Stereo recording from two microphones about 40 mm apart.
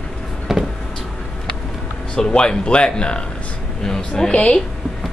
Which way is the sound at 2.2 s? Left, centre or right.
Left.